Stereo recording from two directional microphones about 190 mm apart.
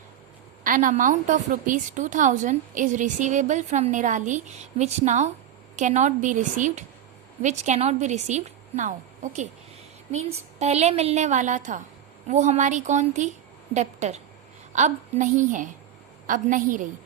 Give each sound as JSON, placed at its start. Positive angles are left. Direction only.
{"t": 0.6, "sound": "a woman's voice", "side_deg": -45}